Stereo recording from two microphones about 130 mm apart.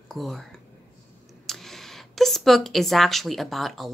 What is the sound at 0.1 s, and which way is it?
A woman's voice, centre (ahead or behind).